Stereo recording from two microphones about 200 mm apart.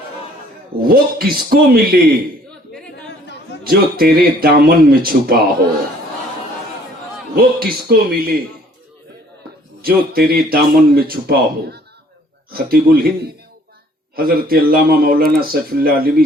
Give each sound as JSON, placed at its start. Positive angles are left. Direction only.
{"t": 0.9, "sound": "speech", "side_deg": -50}
{"t": 3.6, "sound": "speech", "side_deg": -50}
{"t": 7.3, "sound": "speech", "side_deg": -50}
{"t": 9.8, "sound": "speech", "side_deg": -50}